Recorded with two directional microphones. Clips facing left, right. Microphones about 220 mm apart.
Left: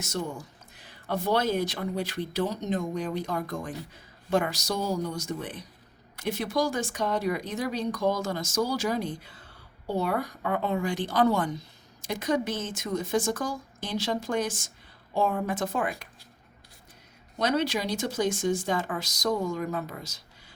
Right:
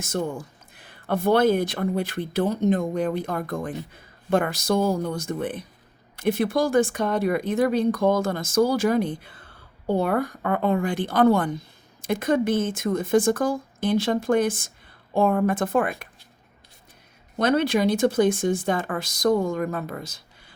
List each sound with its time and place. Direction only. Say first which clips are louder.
0.0 s speech: right 5 dB; 50° right (ahead or behind)
17.3 s speech: right 6 dB; 55° right (ahead or behind)